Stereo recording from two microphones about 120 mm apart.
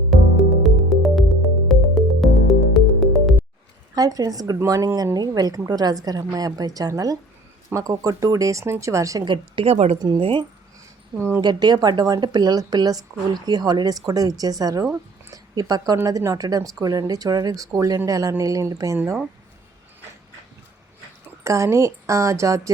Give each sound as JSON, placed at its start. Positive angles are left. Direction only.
{"t": 0.1, "sound": "music", "side_deg": 0}
{"t": 3.9, "sound": "speech", "side_deg": -30}
{"t": 9.2, "sound": "speech", "side_deg": -40}
{"t": 9.6, "sound": "speech", "side_deg": -60}
{"t": 10.0, "sound": "speech", "side_deg": -35}
{"t": 11.3, "sound": "speech", "side_deg": -35}
{"t": 15.3, "sound": "a sound", "side_deg": -30}
{"t": 16.0, "sound": "speech", "side_deg": -30}
{"t": 21.4, "sound": "speech", "side_deg": -25}